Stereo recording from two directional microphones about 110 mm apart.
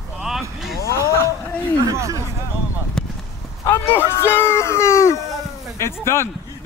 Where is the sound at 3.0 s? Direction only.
5° left (ahead or behind).